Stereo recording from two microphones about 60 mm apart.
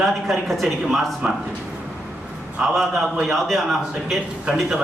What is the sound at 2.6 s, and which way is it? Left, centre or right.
Speech, right.